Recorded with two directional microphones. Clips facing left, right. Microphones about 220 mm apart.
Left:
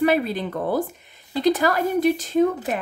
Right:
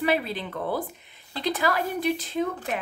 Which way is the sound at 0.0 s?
45° left (ahead or behind).